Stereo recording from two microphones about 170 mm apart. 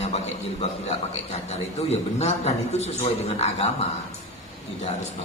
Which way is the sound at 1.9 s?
40° left (ahead or behind).